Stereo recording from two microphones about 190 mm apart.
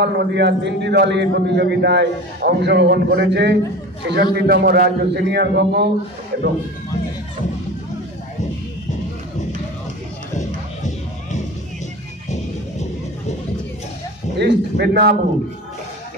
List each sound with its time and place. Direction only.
0.0 s a man's voice: 65° right (ahead or behind)
14.4 s a man's voice: 60° right (ahead or behind)